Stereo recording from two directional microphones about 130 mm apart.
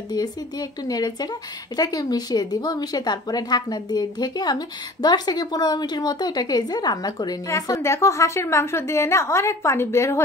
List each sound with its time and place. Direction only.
0.1 s speech: 30° left (ahead or behind)